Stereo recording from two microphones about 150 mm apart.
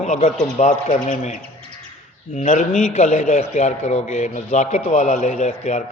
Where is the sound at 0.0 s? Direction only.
50° left (ahead or behind).